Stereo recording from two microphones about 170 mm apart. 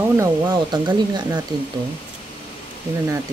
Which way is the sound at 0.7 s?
25° right (ahead or behind).